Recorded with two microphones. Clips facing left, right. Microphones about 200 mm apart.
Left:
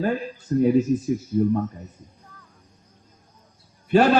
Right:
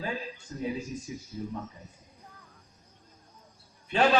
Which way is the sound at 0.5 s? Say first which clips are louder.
Left 16 dB; 55° left (ahead or behind).